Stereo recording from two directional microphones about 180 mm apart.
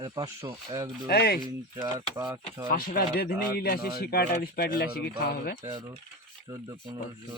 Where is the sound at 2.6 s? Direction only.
55° left (ahead or behind).